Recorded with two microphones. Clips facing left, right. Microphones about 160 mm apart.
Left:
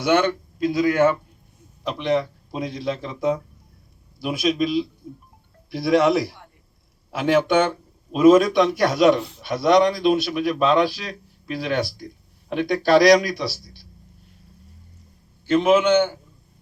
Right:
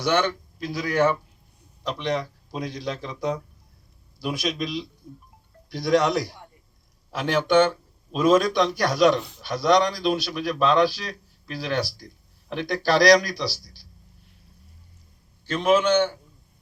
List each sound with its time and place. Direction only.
0.7 s speech: centre (ahead or behind)
15.6 s speech: centre (ahead or behind)